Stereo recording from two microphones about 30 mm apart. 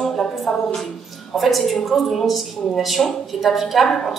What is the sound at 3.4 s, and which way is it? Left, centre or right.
Speech, centre.